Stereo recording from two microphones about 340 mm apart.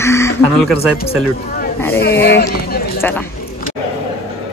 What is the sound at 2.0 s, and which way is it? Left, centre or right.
Speech, left.